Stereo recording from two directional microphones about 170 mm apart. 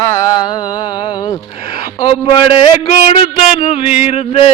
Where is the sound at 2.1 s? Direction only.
30° left (ahead or behind).